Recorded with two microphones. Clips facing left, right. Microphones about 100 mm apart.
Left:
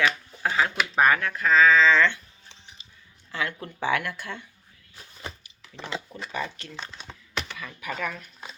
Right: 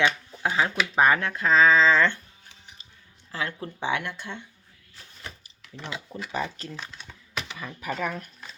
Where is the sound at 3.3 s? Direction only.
30° right (ahead or behind).